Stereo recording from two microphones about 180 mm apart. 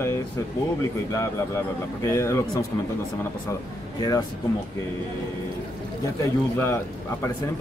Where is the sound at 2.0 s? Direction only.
15° left (ahead or behind).